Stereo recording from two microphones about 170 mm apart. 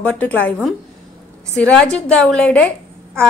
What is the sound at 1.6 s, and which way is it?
A woman's voice, 5° left (ahead or behind).